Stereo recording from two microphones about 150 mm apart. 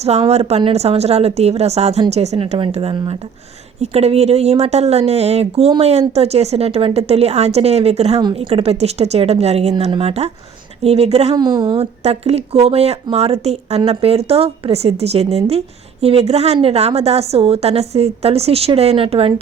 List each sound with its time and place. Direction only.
0.0 s speech: 45° right (ahead or behind)
11.3 s a woman's voice: 25° right (ahead or behind)
11.8 s speech: 45° right (ahead or behind)